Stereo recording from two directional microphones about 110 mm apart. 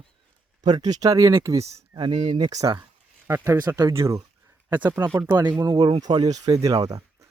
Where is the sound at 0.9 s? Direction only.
35° right (ahead or behind).